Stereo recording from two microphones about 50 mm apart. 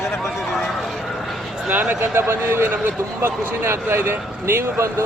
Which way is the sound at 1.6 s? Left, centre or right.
Right.